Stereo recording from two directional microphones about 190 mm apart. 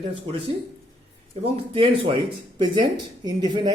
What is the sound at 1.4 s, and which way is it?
Speech, 30° right (ahead or behind).